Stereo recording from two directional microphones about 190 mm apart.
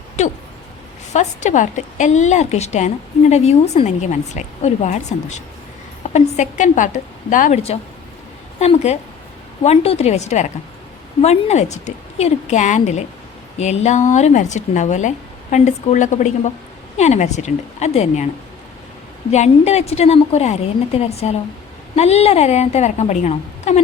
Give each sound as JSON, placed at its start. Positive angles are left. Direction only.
{"t": 0.2, "sound": "a woman's voice", "side_deg": 35}
{"t": 19.3, "sound": "a woman's voice", "side_deg": 35}